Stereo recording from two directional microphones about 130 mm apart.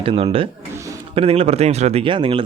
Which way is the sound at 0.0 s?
45° right (ahead or behind).